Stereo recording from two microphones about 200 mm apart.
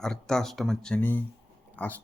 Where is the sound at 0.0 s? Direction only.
5° left (ahead or behind).